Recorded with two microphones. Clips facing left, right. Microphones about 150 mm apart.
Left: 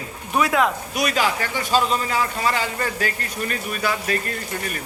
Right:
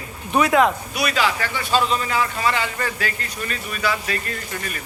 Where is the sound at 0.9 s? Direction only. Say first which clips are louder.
Even; 45° left (ahead or behind).